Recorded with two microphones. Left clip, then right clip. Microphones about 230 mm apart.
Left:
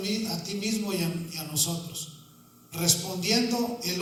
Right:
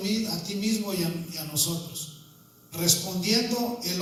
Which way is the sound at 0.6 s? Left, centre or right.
Left.